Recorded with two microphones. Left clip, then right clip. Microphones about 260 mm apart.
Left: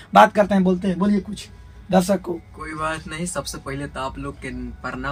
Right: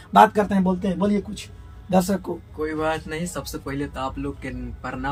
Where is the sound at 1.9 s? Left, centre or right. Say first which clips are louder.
Left 3 dB; left.